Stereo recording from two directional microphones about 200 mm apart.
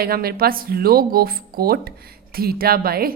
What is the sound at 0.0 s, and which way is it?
A woman's voice, 50° right (ahead or behind).